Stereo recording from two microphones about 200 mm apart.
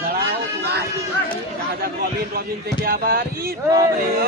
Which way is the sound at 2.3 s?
50° right (ahead or behind).